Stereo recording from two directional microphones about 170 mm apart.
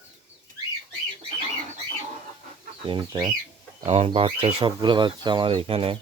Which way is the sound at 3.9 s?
40° right (ahead or behind).